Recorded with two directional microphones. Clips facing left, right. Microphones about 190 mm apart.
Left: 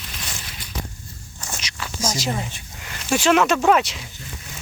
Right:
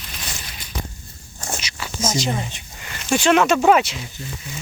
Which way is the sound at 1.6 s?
Centre (ahead or behind).